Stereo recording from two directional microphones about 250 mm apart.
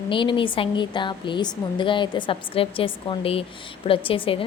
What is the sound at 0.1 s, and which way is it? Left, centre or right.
A woman's voice, centre.